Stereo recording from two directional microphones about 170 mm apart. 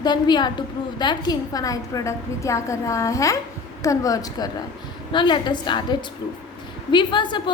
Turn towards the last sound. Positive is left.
turn(degrees=25)  # may be behind; listen again after turning